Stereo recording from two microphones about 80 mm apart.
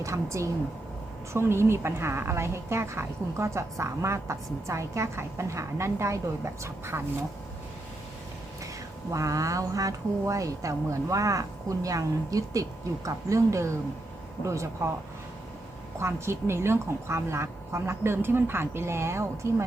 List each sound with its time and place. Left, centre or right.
0.0 s a woman's voice: right
9.1 s a woman's voice: right
16.0 s a woman's voice: right